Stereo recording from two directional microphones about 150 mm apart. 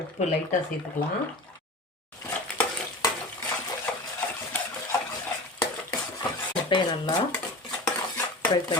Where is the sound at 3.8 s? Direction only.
10° left (ahead or behind).